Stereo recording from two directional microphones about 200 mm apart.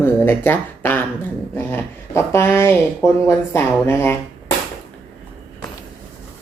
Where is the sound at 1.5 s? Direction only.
15° left (ahead or behind).